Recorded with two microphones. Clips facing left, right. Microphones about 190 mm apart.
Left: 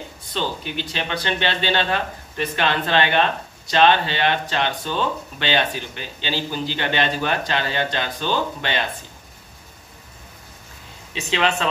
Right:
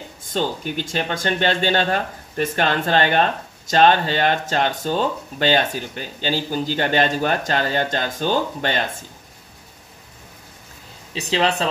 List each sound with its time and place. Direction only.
0.2 s speech: 45° right (ahead or behind)
11.1 s speech: 35° right (ahead or behind)